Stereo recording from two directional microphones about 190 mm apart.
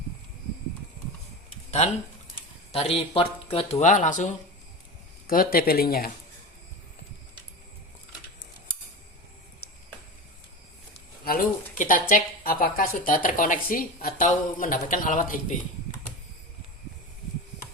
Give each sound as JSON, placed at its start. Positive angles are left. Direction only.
{"t": 1.8, "sound": "speech", "side_deg": 35}
{"t": 5.3, "sound": "speech", "side_deg": 50}
{"t": 9.6, "sound": "a sound", "side_deg": 55}
{"t": 11.3, "sound": "speech", "side_deg": 45}